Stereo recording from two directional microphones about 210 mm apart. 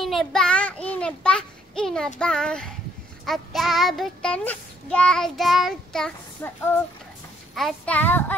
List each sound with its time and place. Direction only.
0.0 s a child's voice: centre (ahead or behind)